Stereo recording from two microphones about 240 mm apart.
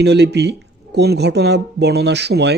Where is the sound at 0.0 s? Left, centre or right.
Right.